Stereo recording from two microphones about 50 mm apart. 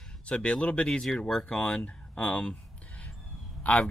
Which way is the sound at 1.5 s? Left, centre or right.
Left.